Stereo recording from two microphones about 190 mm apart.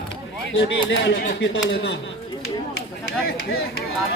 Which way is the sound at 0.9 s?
60° left (ahead or behind).